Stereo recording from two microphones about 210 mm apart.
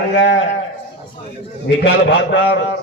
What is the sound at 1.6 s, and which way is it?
A man's voice, 60° left (ahead or behind).